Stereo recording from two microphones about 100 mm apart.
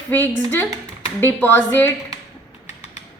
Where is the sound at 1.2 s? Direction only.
20° left (ahead or behind).